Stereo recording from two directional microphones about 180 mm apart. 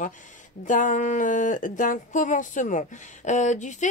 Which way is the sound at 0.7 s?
45° left (ahead or behind).